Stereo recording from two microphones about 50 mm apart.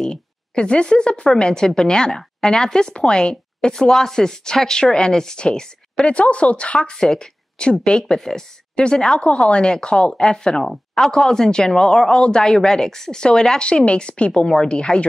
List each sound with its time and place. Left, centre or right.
0.0 s speech: centre